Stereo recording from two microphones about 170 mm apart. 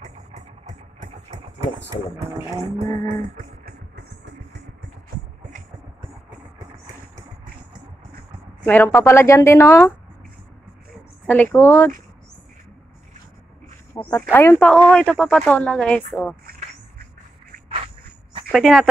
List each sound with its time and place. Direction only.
0.0 s vehicle: 45° right (ahead or behind)
1.9 s speech: 20° right (ahead or behind)
3.2 s music: 50° right (ahead or behind)
8.6 s a woman's voice: 10° left (ahead or behind)
11.2 s a woman's voice: 10° left (ahead or behind)
13.9 s a woman's voice: 10° left (ahead or behind)
18.5 s speech: centre (ahead or behind)